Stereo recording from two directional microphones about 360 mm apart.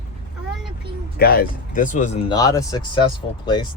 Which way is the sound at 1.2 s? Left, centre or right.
Left.